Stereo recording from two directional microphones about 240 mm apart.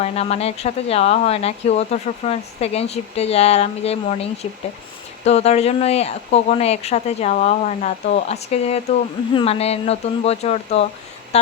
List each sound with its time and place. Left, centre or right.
0.0 s speech: left